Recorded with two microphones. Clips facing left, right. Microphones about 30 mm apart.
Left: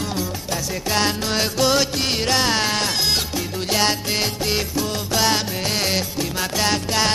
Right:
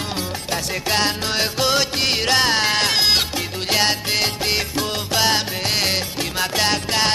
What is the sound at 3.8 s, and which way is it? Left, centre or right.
Music, right.